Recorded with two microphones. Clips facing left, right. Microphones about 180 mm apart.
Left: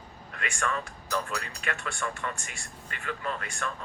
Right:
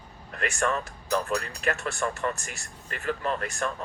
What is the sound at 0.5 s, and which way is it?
Speech, 40° right (ahead or behind).